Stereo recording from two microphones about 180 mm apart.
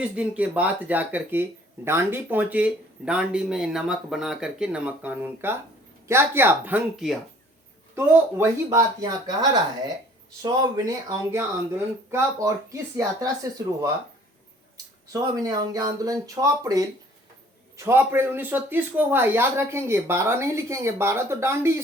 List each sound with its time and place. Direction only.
0.0 s speech: 5° right (ahead or behind)
15.1 s speech: 20° right (ahead or behind)